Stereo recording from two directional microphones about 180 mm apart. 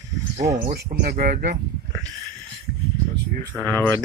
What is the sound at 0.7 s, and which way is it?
Speech, 55° right (ahead or behind).